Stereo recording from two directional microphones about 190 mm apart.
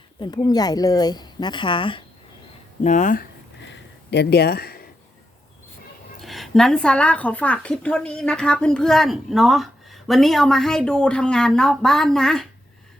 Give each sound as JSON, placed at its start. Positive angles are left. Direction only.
{"t": 0.2, "sound": "speech", "side_deg": 20}
{"t": 2.8, "sound": "speech", "side_deg": 40}
{"t": 3.6, "sound": "a sound", "side_deg": 65}
{"t": 6.1, "sound": "speech", "side_deg": 0}